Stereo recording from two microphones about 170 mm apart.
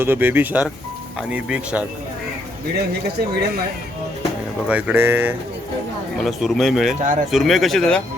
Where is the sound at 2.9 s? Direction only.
70° right (ahead or behind).